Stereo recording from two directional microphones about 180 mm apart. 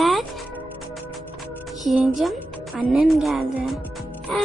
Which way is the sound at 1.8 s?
Centre (ahead or behind).